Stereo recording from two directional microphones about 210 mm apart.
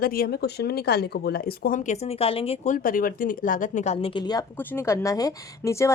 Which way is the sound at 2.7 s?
40° left (ahead or behind).